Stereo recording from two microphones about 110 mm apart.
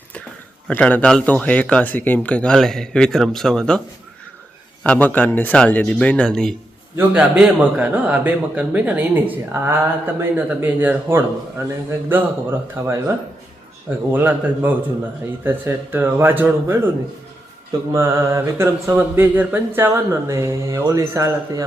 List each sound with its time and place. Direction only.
0.7 s speech: 15° left (ahead or behind)
4.8 s speech: 15° left (ahead or behind)
7.2 s speech: 10° right (ahead or behind)
11.6 s mantra: 25° right (ahead or behind)
14.1 s mantra: 20° right (ahead or behind)
17.9 s mantra: 25° right (ahead or behind)